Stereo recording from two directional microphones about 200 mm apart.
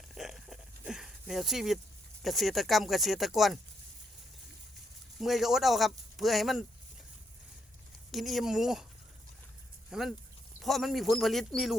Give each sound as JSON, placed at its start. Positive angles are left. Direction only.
{"t": 0.1, "sound": "a sound", "side_deg": 0}
{"t": 2.2, "sound": "speech", "side_deg": 0}
{"t": 5.2, "sound": "speech", "side_deg": 0}
{"t": 8.1, "sound": "speech", "side_deg": 0}
{"t": 9.9, "sound": "speech", "side_deg": 0}